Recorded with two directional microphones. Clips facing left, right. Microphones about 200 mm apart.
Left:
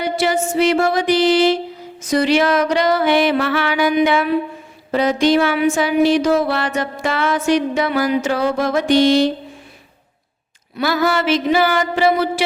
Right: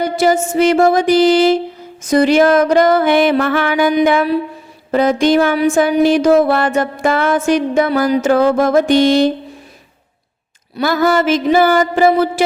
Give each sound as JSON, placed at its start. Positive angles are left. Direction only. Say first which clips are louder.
{"t": 0.0, "sound": "music", "louder": "right 4 dB", "side_deg": -45}
{"t": 10.8, "sound": "music", "louder": "right 4 dB", "side_deg": -45}